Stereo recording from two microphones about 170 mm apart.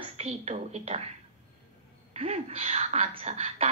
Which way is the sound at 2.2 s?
40° right (ahead or behind).